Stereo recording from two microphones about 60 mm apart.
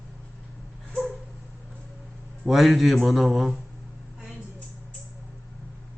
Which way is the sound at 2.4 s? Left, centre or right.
Centre.